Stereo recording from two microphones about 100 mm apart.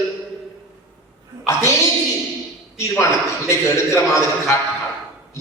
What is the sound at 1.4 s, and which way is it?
Speech, 30° left (ahead or behind).